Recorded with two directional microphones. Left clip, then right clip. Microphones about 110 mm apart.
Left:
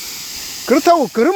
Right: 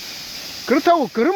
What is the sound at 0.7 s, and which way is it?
Speech, 35° left (ahead or behind).